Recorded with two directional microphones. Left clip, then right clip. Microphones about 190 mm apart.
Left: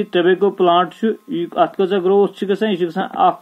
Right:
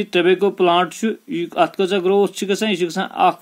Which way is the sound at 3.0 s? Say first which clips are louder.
Left 2 dB; 35° right (ahead or behind).